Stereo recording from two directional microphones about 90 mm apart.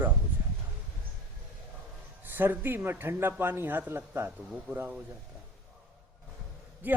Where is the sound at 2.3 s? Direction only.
25° right (ahead or behind).